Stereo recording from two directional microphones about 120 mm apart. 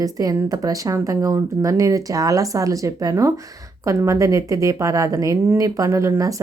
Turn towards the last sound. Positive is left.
turn(degrees=-25)  # may be behind; listen again after turning